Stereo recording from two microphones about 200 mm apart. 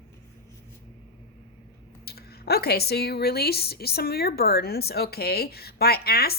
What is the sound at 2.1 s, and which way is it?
Speech, 50° left (ahead or behind).